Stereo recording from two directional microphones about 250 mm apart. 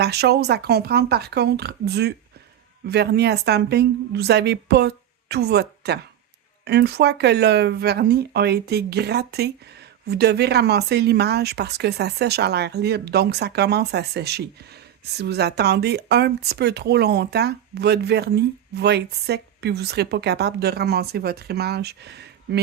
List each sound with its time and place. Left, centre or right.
0.0 s speech: right